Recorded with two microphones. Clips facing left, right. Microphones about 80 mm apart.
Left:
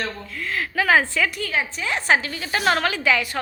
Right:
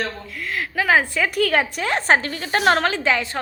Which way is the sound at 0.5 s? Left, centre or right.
Centre.